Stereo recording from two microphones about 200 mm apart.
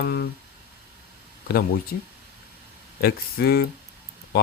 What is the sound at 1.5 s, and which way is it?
Speech, 50° left (ahead or behind).